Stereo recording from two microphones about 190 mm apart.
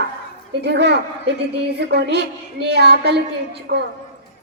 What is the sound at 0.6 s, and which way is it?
A woman's voice, 60° right (ahead or behind).